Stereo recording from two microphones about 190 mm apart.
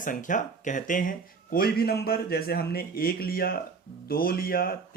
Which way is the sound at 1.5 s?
55° left (ahead or behind).